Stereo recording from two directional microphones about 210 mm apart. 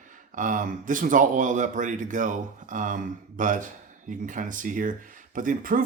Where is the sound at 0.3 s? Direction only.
40° right (ahead or behind).